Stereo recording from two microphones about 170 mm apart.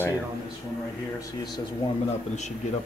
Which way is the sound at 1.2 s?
25° left (ahead or behind).